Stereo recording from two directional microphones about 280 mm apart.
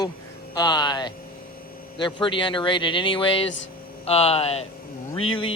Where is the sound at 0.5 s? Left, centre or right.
Centre.